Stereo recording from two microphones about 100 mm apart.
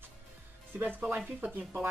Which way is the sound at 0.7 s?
20° right (ahead or behind).